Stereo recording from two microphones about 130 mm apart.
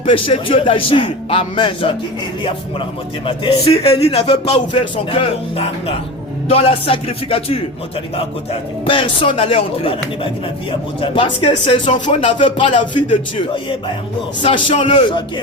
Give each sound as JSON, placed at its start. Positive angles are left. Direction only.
{"t": 0.0, "sound": "a man's voice", "side_deg": 45}
{"t": 3.7, "sound": "a man's voice", "side_deg": 50}
{"t": 8.9, "sound": "a man's voice", "side_deg": 40}